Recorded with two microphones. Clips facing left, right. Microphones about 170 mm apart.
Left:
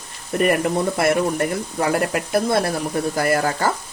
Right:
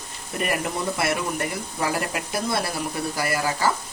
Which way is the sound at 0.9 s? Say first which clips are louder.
Left 7 dB; 50° left (ahead or behind).